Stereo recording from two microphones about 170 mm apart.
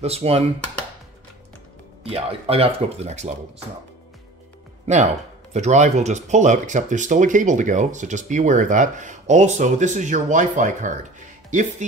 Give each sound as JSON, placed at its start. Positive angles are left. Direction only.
{"t": 0.0, "sound": "speech", "side_deg": -35}
{"t": 2.0, "sound": "speech", "side_deg": -35}
{"t": 5.5, "sound": "speech", "side_deg": -45}